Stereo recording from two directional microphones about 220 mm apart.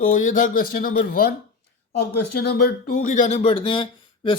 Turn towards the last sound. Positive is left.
turn(degrees=25)  # may be behind; listen again after turning